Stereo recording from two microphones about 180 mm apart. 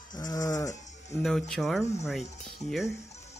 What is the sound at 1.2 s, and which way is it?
Speech, centre (ahead or behind).